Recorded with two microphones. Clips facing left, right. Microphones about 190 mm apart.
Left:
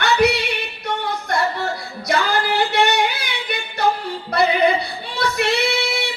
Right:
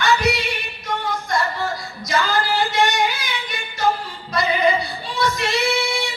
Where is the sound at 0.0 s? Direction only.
60° left (ahead or behind).